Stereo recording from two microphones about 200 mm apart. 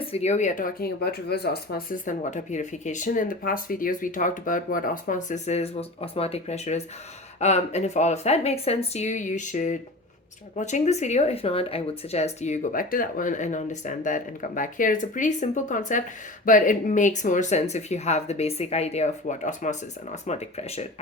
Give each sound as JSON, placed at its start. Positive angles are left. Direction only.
{"t": 0.0, "sound": "speech", "side_deg": 30}